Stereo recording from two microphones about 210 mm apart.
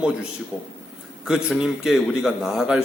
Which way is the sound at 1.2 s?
5° right (ahead or behind).